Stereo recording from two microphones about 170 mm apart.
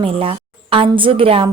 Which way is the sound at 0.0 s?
35° right (ahead or behind).